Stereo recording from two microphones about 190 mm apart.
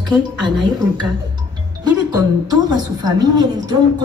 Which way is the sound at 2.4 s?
20° right (ahead or behind).